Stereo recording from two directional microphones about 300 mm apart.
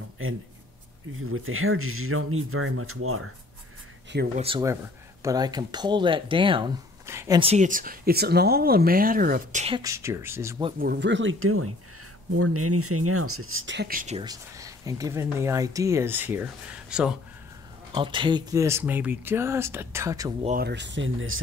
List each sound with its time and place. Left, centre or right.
0.2 s speech: right
4.4 s speech: centre
9.8 s speech: centre
10.8 s speech: right; by 17.1 s centre
17.9 s speech: centre
20.4 s speech: right